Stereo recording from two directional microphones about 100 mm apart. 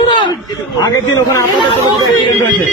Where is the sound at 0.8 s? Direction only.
35° left (ahead or behind).